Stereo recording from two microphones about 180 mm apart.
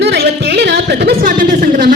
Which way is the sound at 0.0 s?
65° right (ahead or behind).